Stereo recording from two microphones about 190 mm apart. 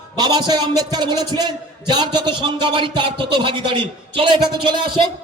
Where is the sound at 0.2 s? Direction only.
25° right (ahead or behind).